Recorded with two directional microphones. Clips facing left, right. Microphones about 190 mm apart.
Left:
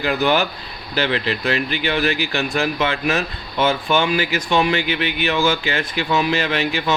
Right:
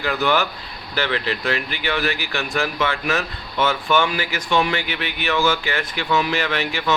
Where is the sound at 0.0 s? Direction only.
20° left (ahead or behind).